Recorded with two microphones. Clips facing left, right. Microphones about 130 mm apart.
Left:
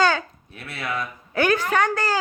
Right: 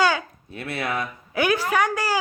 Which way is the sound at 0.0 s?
10° right (ahead or behind).